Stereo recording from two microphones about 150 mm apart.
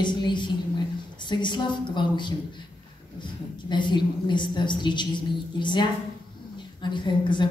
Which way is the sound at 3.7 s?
30° left (ahead or behind).